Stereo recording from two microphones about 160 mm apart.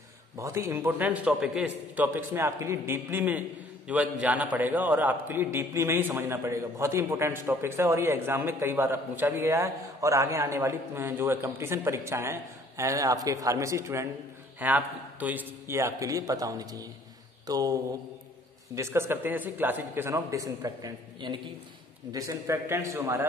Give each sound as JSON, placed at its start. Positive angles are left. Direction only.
{"t": 0.4, "sound": "a man's voice", "side_deg": -20}
{"t": 18.8, "sound": "a man's voice", "side_deg": -15}